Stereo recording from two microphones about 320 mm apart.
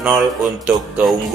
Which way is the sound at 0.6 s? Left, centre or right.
Centre.